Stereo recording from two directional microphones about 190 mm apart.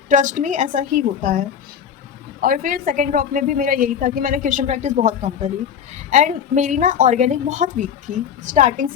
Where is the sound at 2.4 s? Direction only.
45° right (ahead or behind).